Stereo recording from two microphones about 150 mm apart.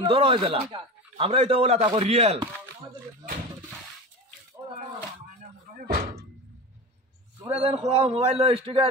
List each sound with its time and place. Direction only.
0.0 s a man's voice: 40° right (ahead or behind)
5.8 s slam: 80° right
7.5 s a man's voice: 40° right (ahead or behind)